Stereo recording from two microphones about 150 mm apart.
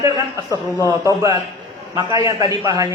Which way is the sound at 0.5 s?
20° left (ahead or behind).